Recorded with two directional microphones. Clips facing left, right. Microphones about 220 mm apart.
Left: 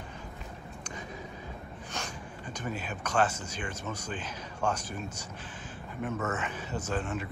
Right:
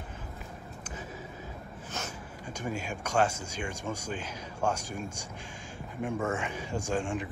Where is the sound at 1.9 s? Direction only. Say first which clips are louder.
Right 1 dB; 5° right (ahead or behind).